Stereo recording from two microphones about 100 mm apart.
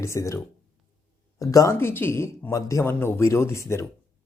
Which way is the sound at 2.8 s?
20° left (ahead or behind).